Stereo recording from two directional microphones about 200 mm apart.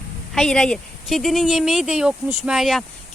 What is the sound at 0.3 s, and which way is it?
Speech, 5° left (ahead or behind).